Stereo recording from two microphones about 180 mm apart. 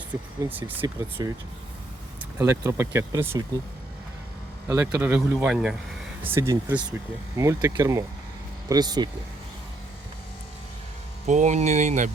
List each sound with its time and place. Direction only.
0.4 s speech: 10° right (ahead or behind)
2.4 s speech: 15° right (ahead or behind)
4.7 s speech: 15° right (ahead or behind)
11.3 s speech: 40° right (ahead or behind)